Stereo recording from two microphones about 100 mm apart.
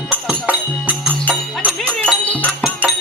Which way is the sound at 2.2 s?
15° left (ahead or behind).